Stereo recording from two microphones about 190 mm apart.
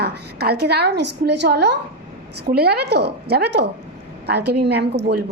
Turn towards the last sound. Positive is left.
turn(degrees=-60)  # may be behind; listen again after turning